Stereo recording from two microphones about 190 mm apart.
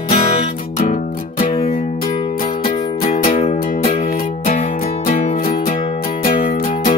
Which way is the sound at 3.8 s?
35° left (ahead or behind).